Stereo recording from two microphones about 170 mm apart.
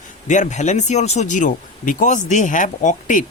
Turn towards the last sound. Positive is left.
turn(degrees=50)  # may be behind; listen again after turning